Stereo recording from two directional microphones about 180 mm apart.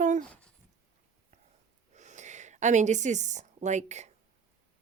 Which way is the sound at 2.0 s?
40° right (ahead or behind).